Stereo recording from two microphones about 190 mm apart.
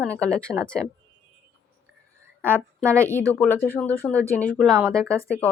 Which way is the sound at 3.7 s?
10° left (ahead or behind).